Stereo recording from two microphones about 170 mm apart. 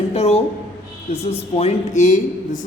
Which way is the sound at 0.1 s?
40° left (ahead or behind).